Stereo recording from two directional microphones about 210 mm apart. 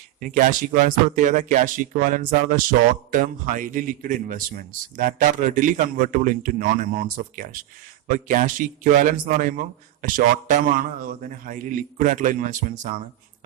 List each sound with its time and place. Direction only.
0.2 s speech: 40° right (ahead or behind)